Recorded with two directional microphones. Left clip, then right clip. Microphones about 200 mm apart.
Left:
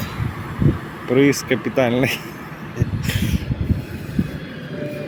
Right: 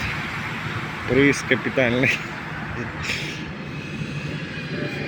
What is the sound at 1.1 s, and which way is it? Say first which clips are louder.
Speech: left 2 dB; 10° left (ahead or behind).